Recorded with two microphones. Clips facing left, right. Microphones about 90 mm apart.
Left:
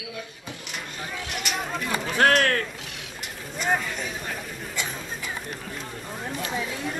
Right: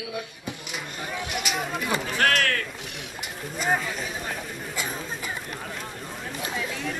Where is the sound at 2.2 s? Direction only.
35° left (ahead or behind).